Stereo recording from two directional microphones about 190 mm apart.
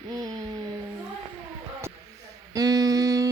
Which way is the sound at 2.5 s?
20° right (ahead or behind).